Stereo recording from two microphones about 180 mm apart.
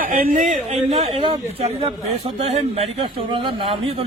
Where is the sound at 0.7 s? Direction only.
35° right (ahead or behind).